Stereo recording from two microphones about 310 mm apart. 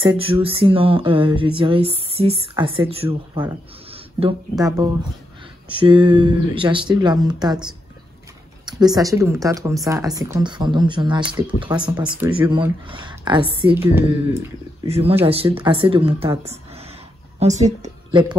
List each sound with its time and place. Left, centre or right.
0.0 s speech: centre
8.6 s speech: centre
14.9 s a woman's voice: centre